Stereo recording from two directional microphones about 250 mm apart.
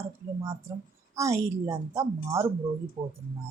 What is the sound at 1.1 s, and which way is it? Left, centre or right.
Speech, centre.